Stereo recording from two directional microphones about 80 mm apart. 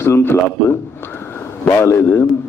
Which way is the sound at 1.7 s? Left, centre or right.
Left.